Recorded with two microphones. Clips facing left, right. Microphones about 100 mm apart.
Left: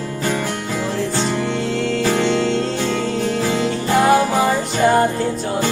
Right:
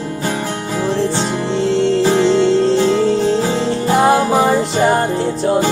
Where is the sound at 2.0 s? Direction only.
30° right (ahead or behind).